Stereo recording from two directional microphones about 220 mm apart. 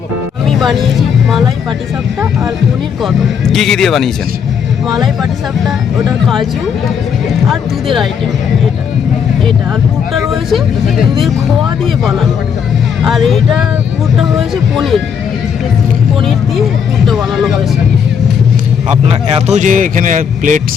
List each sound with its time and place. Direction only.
0.4 s speech: centre (ahead or behind)
3.0 s speech: centre (ahead or behind)
6.2 s speech: centre (ahead or behind)
7.5 s speech: centre (ahead or behind)
10.2 s speech: centre (ahead or behind)
13.0 s speech: centre (ahead or behind)
17.1 s speech: centre (ahead or behind)
19.0 s a man's voice: 30° right (ahead or behind)